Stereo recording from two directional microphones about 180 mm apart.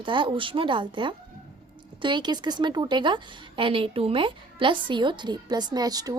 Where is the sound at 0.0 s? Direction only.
25° right (ahead or behind).